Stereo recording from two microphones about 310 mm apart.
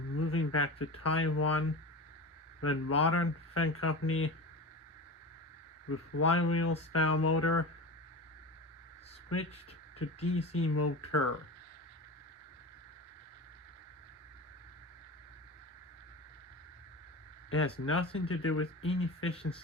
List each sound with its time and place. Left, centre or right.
0.2 s speech: left
5.9 s speech: left
9.3 s speech: left
10.2 s speech: centre
10.6 s speech: left
17.6 s speech: left